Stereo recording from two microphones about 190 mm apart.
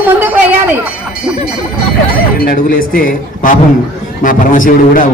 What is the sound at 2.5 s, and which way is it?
A man's voice, 50° left (ahead or behind).